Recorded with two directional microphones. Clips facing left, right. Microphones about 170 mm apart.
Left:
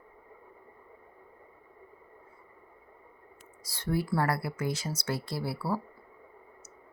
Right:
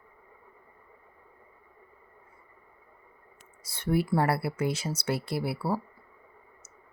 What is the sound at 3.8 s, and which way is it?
Speech, 25° right (ahead or behind).